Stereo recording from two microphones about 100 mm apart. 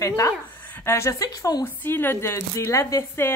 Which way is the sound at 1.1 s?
40° left (ahead or behind).